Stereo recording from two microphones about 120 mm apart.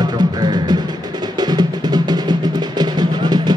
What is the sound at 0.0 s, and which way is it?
Music, 35° right (ahead or behind).